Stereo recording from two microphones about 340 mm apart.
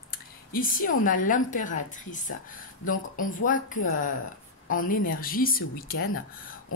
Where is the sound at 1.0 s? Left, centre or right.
Left.